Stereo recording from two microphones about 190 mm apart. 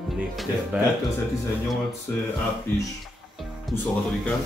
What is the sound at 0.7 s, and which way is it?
Speech, 5° right (ahead or behind).